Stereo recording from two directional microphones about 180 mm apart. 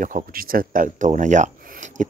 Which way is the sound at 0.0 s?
50° right (ahead or behind).